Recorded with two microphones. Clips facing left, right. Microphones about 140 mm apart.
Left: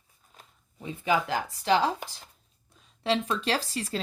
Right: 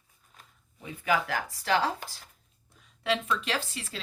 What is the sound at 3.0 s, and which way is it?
Speech, 35° left (ahead or behind).